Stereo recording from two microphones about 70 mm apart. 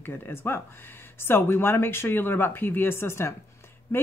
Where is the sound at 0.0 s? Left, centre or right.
Left.